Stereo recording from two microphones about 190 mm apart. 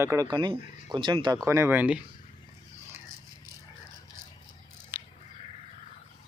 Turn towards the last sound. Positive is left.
turn(degrees=-10)  # may be behind; listen again after turning